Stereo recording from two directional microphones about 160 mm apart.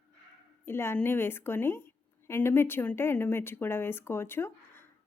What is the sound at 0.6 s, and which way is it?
A woman's voice, 15° left (ahead or behind).